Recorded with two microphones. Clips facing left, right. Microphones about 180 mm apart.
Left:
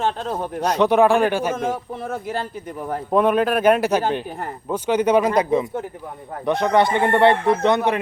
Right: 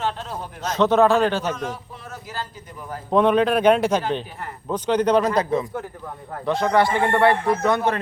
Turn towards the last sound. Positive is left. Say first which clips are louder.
# left 2 dB
turn(degrees=25)  # may be behind; listen again after turning